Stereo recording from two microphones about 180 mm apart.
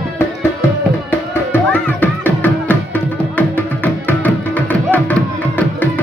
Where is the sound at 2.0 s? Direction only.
10° left (ahead or behind).